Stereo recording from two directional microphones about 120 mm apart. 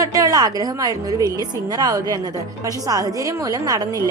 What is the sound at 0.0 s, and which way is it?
A woman's voice, 30° right (ahead or behind).